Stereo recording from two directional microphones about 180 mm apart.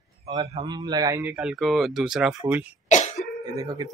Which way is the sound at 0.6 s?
25° right (ahead or behind).